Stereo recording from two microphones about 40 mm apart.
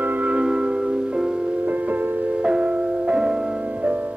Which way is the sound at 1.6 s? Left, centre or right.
Right.